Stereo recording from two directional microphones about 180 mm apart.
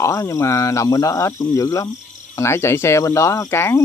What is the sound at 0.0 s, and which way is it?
Speech, 15° left (ahead or behind).